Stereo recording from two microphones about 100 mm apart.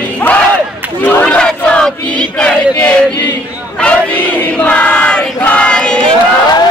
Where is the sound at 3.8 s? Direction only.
15° left (ahead or behind).